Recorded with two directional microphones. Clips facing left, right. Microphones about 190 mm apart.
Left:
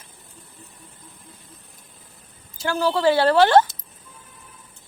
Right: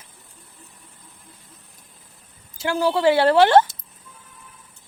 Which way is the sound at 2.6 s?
20° right (ahead or behind).